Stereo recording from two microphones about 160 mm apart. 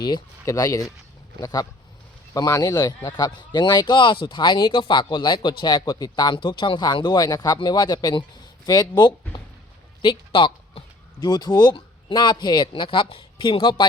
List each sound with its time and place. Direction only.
0.0 s speech: 25° left (ahead or behind)